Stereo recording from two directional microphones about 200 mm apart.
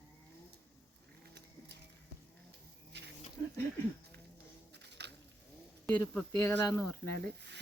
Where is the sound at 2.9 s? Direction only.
60° right (ahead or behind).